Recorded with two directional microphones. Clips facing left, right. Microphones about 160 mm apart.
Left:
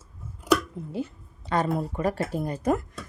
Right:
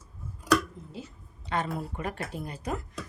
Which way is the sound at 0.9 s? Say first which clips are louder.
Left 14 dB; 55° left (ahead or behind).